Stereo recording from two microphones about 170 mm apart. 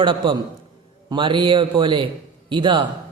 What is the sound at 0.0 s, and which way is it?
A man's voice, 30° right (ahead or behind).